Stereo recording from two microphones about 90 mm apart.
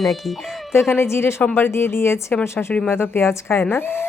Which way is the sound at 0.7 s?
25° left (ahead or behind).